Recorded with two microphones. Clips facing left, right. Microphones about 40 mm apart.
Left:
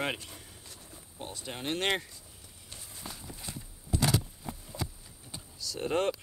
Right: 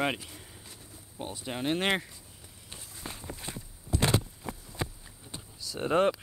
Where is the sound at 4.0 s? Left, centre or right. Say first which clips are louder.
Right 2 dB; right.